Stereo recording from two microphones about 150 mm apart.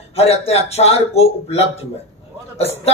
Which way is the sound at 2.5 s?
45° left (ahead or behind).